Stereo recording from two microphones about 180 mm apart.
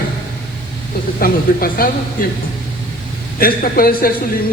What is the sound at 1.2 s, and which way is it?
Speech, 55° left (ahead or behind).